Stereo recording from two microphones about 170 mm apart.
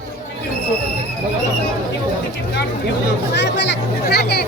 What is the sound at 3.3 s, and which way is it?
Speech, 90° left.